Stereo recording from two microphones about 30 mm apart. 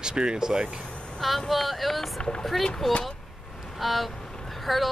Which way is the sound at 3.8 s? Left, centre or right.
Centre.